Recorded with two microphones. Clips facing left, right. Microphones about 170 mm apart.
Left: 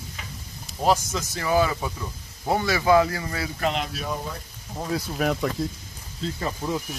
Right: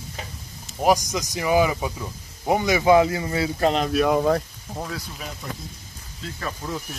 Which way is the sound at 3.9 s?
85° right.